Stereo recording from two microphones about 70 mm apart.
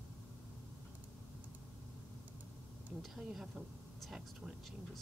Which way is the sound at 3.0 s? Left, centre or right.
Centre.